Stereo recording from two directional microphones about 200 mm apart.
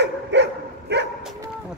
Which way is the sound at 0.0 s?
60° right (ahead or behind).